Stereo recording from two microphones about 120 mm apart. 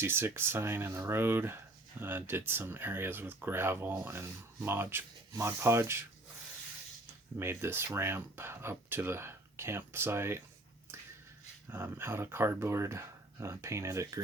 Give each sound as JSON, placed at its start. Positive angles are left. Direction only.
{"t": 0.0, "sound": "speech", "side_deg": -20}
{"t": 7.3, "sound": "speech", "side_deg": -20}
{"t": 11.7, "sound": "speech", "side_deg": -20}